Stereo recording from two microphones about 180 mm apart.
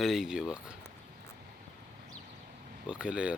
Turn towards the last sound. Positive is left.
turn(degrees=-5)  # may be behind; listen again after turning